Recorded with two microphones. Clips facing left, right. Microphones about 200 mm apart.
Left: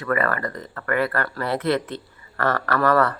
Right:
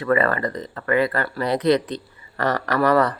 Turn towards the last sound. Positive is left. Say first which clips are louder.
# right 1 dB
turn(degrees=-15)  # may be behind; listen again after turning